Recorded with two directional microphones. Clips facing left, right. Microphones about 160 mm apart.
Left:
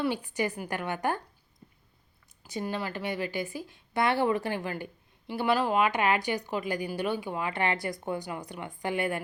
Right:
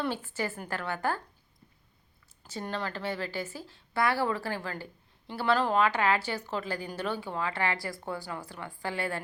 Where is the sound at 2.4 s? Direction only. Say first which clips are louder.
Left 2 dB; 15° left (ahead or behind).